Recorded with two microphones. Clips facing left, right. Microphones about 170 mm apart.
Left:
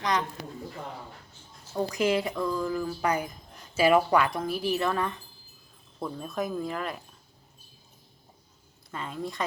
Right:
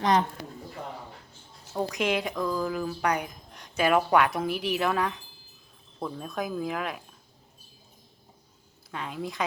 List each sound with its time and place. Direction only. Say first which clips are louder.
0.0 s a man's voice: right 5 dB; 25° right (ahead or behind)
1.9 s speech: left 3 dB; centre (ahead or behind)
8.9 s speech: even; centre (ahead or behind)